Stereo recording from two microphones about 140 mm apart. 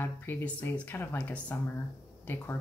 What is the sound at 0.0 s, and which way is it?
A woman's voice, 15° left (ahead or behind).